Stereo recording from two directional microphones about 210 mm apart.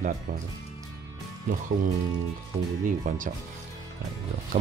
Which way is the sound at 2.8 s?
35° right (ahead or behind).